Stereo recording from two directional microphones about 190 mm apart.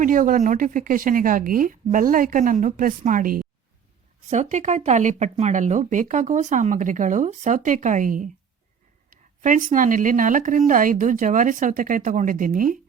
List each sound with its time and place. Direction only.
0.0 s speech: 45° right (ahead or behind)